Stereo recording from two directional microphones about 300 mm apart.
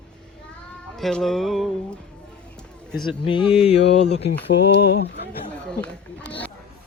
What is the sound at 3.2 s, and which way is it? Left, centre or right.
Mantra, centre.